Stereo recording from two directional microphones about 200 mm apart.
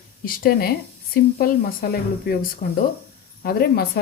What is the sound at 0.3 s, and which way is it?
Speech, 45° left (ahead or behind).